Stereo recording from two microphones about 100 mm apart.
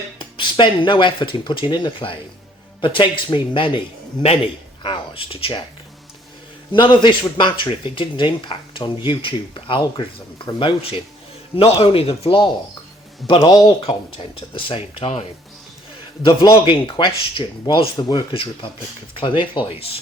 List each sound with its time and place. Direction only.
0.2 s speech: 50° left (ahead or behind)
4.8 s speech: 60° left (ahead or behind)
6.7 s speech: 50° left (ahead or behind)
11.5 s speech: 70° left (ahead or behind)
16.2 s speech: 45° left (ahead or behind)